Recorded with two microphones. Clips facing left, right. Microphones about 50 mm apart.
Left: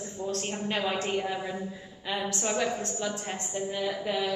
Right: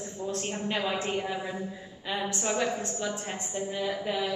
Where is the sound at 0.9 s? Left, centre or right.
Centre.